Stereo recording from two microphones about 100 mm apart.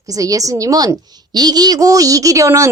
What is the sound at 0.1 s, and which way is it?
A woman's voice, 35° right (ahead or behind).